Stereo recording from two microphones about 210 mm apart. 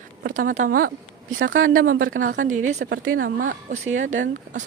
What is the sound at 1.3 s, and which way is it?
Speech, 70° right (ahead or behind).